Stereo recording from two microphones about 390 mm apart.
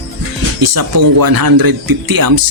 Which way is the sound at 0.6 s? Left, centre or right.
Right.